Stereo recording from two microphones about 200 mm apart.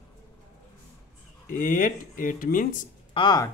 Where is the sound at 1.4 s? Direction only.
40° left (ahead or behind).